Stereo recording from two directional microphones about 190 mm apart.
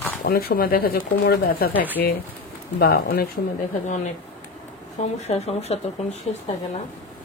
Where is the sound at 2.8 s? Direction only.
55° left (ahead or behind).